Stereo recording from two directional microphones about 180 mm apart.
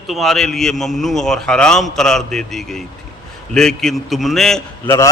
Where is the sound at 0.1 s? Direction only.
Centre (ahead or behind).